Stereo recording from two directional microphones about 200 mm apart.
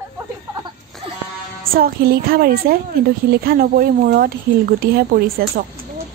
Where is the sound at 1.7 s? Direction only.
50° right (ahead or behind).